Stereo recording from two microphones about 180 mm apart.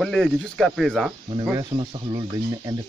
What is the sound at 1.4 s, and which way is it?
Speech, 25° right (ahead or behind).